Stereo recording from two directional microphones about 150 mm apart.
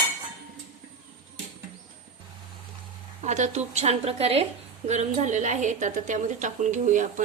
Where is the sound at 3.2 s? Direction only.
50° right (ahead or behind).